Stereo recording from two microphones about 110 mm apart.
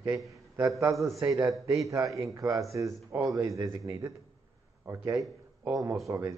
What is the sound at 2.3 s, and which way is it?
Speech, 30° right (ahead or behind).